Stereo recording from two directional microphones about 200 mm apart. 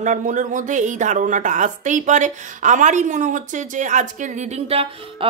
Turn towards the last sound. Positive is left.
turn(degrees=-35)  # may be behind; listen again after turning